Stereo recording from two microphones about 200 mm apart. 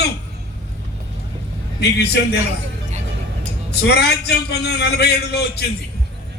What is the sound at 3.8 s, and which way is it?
A man's voice, 55° left (ahead or behind).